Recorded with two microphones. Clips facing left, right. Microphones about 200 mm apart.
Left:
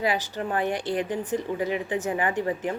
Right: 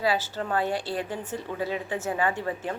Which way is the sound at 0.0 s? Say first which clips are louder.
Even; 15° left (ahead or behind).